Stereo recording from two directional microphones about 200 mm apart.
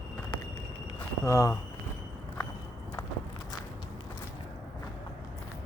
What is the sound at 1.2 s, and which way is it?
Speech, 15° left (ahead or behind).